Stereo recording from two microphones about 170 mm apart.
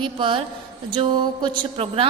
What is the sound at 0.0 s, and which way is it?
A woman's voice, 30° right (ahead or behind).